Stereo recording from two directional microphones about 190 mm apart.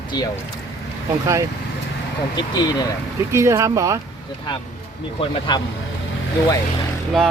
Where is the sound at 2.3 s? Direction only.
20° left (ahead or behind).